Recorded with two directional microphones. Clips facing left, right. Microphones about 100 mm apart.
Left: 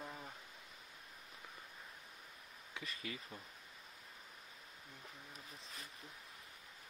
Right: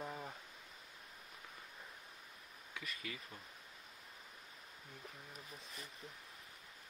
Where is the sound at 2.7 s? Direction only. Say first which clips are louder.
Left 1 dB; 30° left (ahead or behind).